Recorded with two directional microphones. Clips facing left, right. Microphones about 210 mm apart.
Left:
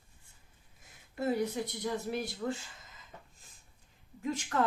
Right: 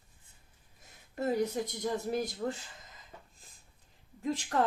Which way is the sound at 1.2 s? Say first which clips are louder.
Right 1 dB; 40° right (ahead or behind).